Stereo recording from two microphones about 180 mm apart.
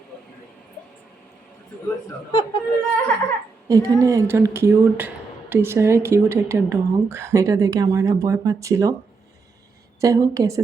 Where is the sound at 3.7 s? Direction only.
15° right (ahead or behind).